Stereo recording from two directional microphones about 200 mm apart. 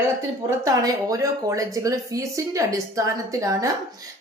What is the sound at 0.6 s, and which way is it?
Speech, 15° right (ahead or behind).